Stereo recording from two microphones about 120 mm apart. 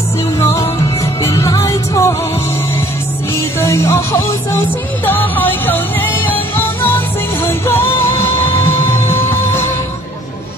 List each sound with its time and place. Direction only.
1.2 s music: 25° left (ahead or behind)
3.6 s music: 20° left (ahead or behind)